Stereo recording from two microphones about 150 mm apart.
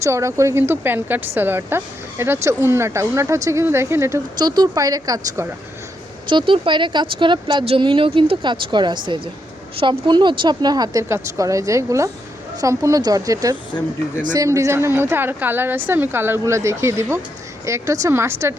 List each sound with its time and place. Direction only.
0.0 s a woman's voice: 20° right (ahead or behind)
4.4 s a woman's voice: 30° right (ahead or behind)